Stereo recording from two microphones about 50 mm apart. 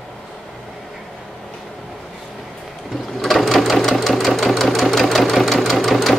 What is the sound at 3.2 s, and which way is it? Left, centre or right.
Sewing machine, centre.